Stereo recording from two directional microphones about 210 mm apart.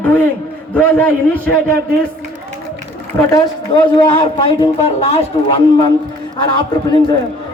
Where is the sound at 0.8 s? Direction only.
10° left (ahead or behind).